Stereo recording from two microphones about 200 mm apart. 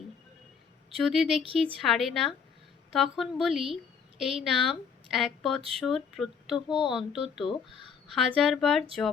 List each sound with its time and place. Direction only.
1.0 s speech: centre (ahead or behind)
7.7 s speech: 25° left (ahead or behind)
8.1 s speech: centre (ahead or behind)